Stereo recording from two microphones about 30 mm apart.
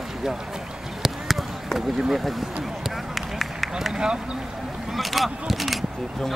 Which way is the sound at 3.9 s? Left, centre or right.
Right.